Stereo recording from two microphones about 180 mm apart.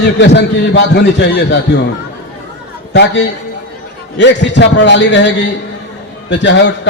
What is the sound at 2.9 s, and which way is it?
A man's voice, 75° left (ahead or behind).